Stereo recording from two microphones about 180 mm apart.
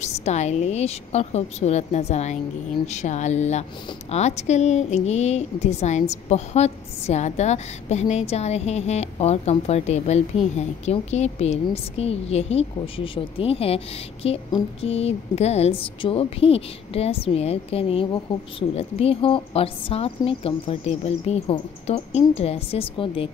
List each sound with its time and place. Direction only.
0.0 s a woman's voice: 40° left (ahead or behind)